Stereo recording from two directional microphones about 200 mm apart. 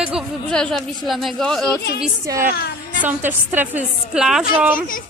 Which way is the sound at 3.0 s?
10° right (ahead or behind).